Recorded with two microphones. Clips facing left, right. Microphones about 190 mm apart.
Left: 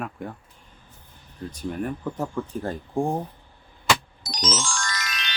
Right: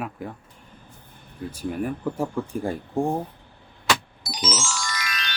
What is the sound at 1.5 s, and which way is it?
Speech, 5° right (ahead or behind).